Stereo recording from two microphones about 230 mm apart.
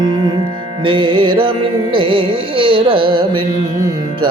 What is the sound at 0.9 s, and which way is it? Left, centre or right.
Carnatic music, right.